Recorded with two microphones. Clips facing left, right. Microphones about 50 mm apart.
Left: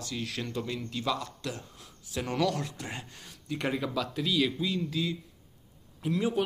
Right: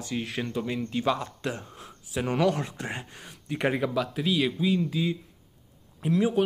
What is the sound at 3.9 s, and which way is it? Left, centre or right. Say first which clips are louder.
A man's voice: right 3 dB; centre.